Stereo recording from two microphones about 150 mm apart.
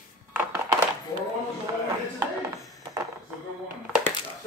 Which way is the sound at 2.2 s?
20° right (ahead or behind).